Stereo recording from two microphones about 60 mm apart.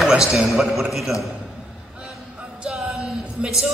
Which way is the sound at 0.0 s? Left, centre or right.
Centre.